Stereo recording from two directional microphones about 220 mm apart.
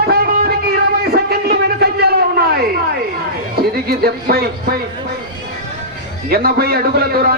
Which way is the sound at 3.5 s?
45° right (ahead or behind).